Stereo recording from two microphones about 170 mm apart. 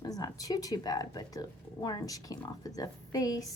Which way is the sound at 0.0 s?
20° left (ahead or behind).